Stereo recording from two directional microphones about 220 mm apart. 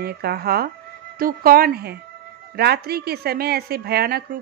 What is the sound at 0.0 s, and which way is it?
A woman's voice, 45° right (ahead or behind).